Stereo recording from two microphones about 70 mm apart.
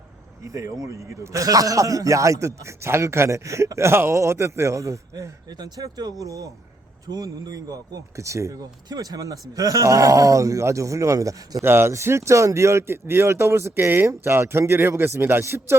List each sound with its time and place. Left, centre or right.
0.4 s speech: right
5.5 s speech: right
7.1 s speech: right
8.9 s speech: right
11.6 s speech: right